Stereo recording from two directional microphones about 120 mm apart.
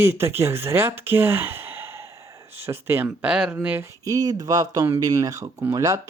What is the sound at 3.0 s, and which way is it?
Speech, 10° right (ahead or behind).